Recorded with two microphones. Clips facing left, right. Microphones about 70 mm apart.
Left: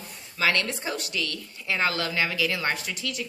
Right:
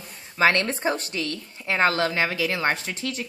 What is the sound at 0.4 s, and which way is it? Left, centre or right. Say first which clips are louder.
A woman's voice: right 5 dB; right.